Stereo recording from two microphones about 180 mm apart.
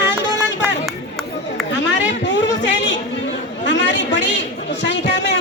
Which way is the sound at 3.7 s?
80° left.